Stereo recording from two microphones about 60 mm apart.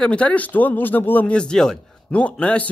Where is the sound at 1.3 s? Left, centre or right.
Centre.